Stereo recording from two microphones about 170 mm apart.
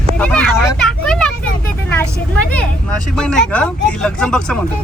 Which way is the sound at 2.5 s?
5° left (ahead or behind).